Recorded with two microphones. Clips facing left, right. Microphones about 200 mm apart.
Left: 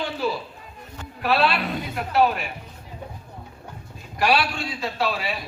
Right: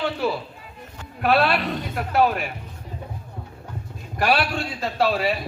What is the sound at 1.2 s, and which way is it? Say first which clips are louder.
Speech: right 2 dB; 50° right (ahead or behind).